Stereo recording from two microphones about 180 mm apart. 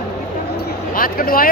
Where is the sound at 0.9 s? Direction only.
55° left (ahead or behind).